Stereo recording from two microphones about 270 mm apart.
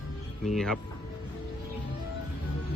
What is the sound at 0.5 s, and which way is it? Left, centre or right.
Speech, centre.